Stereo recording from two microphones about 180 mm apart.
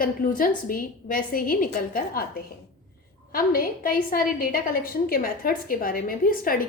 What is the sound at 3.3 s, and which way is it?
A woman's voice, 55° left (ahead or behind).